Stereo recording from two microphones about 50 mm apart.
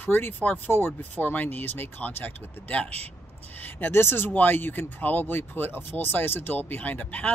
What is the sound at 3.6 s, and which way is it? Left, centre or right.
Speech, left.